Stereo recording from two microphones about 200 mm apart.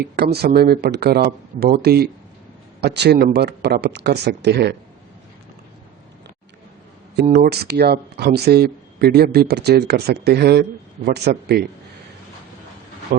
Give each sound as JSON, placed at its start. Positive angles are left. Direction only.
{"t": 0.0, "sound": "speech", "side_deg": -55}
{"t": 7.3, "sound": "speech", "side_deg": -50}
{"t": 13.1, "sound": "speech", "side_deg": -50}